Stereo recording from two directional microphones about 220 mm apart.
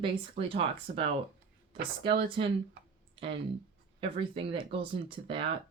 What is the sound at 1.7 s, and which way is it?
Speech, 45° right (ahead or behind).